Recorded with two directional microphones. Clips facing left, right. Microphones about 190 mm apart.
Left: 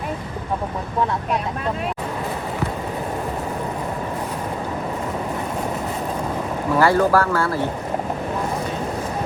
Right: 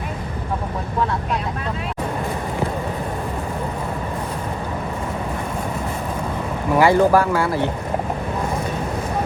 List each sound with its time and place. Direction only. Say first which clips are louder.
6.7 s speech: right 2 dB; 15° right (ahead or behind)